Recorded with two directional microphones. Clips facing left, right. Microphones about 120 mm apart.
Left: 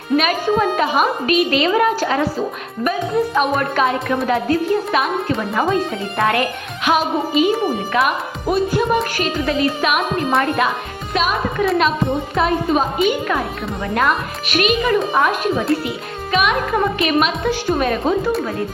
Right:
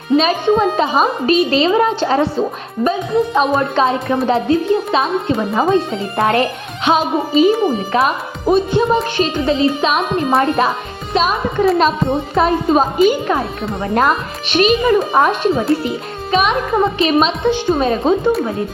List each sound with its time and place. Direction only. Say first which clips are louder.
0.2 s speech: right 3 dB; 25° right (ahead or behind)
11.1 s music: right 3 dB; 30° right (ahead or behind)
12.3 s a woman's voice: right 4 dB; 30° right (ahead or behind)